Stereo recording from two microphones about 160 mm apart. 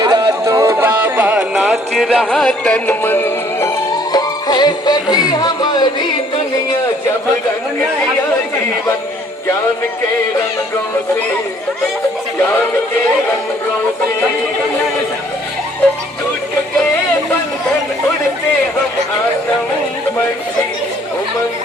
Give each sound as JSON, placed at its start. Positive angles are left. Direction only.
{"t": 0.0, "sound": "music", "side_deg": -25}
{"t": 4.1, "sound": "music", "side_deg": 25}